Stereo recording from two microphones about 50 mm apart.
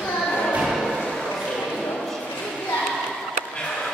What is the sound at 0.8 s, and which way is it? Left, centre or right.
Music, centre.